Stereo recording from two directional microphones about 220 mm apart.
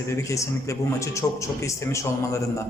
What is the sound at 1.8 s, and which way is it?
Speech, 15° left (ahead or behind).